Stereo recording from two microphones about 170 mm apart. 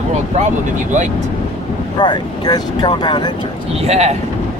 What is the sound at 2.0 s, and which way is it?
Speech, 25° left (ahead or behind).